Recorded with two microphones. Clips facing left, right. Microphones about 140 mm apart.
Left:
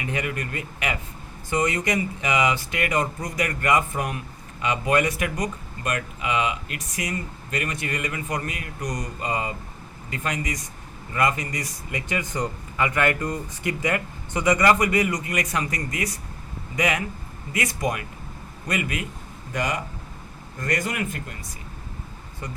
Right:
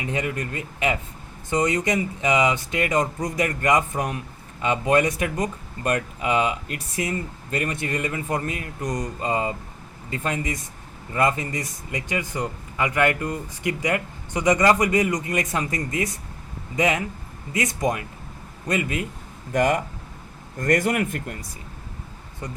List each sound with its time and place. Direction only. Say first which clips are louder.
0.0 s speech: right 2 dB; 25° right (ahead or behind)
19.5 s speech: right 7 dB; 50° right (ahead or behind)